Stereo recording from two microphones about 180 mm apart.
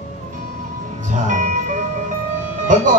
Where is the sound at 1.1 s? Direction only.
45° right (ahead or behind).